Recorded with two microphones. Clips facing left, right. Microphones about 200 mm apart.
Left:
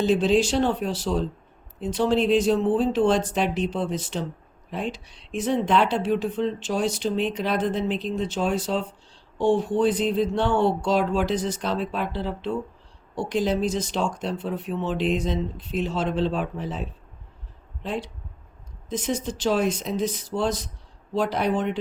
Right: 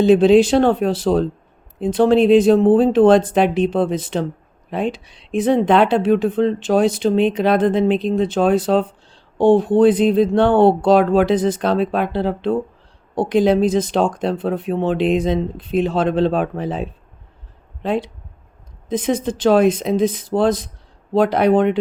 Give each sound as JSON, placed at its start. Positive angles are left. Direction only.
{"t": 0.0, "sound": "speech", "side_deg": -55}